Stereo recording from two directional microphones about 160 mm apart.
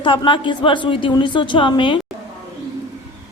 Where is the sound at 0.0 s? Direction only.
30° left (ahead or behind).